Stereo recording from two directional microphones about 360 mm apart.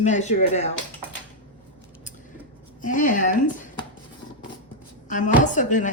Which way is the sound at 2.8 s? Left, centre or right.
Left.